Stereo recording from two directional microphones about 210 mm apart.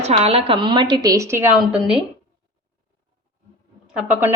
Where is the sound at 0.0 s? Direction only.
30° right (ahead or behind); by 2.0 s 5° right (ahead or behind).